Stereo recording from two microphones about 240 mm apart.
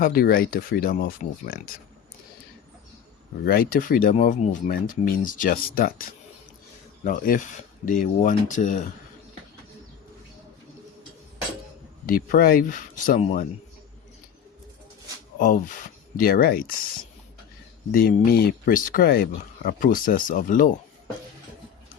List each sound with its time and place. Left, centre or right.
0.0 s speech: left
3.4 s speech: left
7.0 s speech: left
12.0 s speech: left
15.4 s speech: left
17.9 s speech: left